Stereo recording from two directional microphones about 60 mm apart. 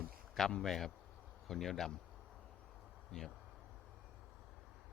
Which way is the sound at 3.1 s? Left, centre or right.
Centre.